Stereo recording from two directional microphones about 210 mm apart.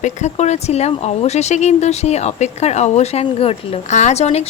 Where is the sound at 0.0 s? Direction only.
35° left (ahead or behind).